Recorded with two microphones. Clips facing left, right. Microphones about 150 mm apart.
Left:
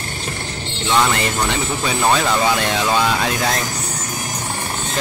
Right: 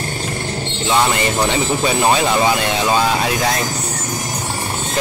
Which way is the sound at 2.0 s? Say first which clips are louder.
Even; 15° right (ahead or behind).